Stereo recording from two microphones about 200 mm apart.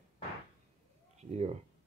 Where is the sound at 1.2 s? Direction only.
30° right (ahead or behind).